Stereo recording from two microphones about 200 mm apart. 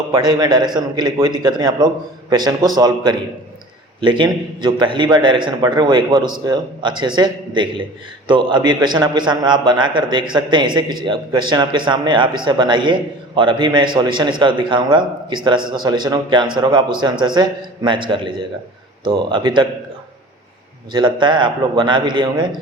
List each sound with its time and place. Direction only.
0.1 s a man's voice: 20° right (ahead or behind)
20.9 s a man's voice: 25° right (ahead or behind)